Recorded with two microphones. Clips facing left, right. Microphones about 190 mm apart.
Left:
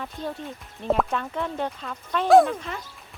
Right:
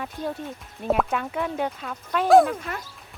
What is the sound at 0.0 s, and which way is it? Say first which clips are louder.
Speech: right 2 dB; 5° right (ahead or behind).